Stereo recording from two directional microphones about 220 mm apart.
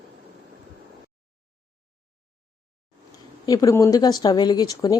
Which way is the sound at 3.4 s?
15° left (ahead or behind).